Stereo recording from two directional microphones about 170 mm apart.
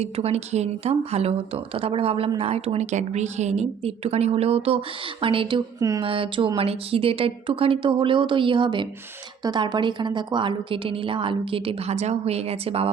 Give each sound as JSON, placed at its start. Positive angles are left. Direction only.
{"t": 0.0, "sound": "a woman's voice", "side_deg": -35}